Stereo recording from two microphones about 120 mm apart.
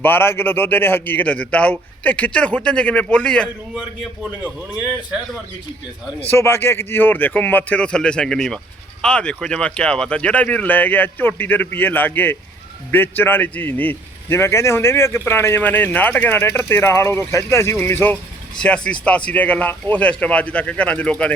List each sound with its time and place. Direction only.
0.0 s speech: 15° left (ahead or behind)
3.8 s a man's voice: 15° right (ahead or behind)
6.1 s a man's voice: 20° left (ahead or behind)